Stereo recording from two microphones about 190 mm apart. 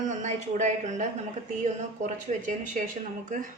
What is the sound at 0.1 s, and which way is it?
Speech, 40° right (ahead or behind).